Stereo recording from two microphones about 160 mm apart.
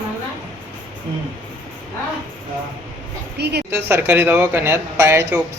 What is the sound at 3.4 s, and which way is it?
Speech, 90° right.